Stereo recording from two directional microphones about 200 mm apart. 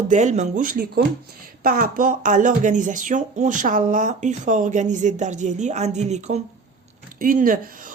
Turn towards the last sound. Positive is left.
turn(degrees=-40)  # may be behind; listen again after turning